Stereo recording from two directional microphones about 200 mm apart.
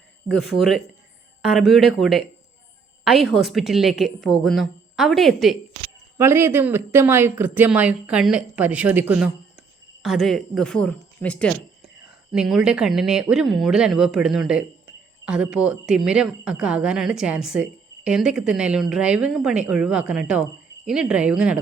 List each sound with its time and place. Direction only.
0.5 s a woman's voice: centre (ahead or behind)
6.1 s a woman's voice: 10° right (ahead or behind)